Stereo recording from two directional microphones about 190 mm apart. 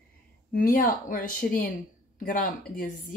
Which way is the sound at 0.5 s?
45° left (ahead or behind).